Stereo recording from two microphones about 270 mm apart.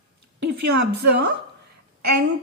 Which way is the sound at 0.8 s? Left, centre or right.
Right.